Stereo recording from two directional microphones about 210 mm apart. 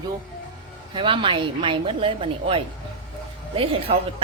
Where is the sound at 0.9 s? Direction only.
25° right (ahead or behind).